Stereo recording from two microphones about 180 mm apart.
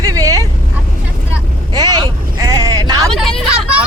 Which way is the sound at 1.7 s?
20° right (ahead or behind).